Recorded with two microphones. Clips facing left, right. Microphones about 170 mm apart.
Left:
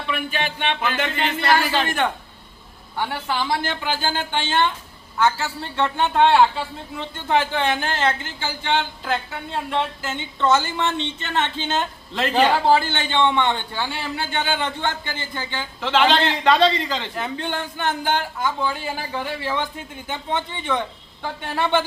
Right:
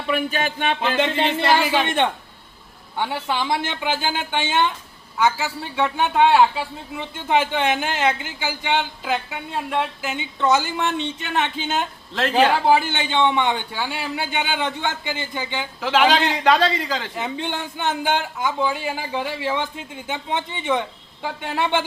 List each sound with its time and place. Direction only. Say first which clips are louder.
0.1 s speech: right 4 dB; 45° right (ahead or behind)
0.8 s a man's voice: right 3 dB; 25° right (ahead or behind)
12.1 s a man's voice: right 1 dB; centre (ahead or behind)
17.2 s a man's voice: even; 20° right (ahead or behind)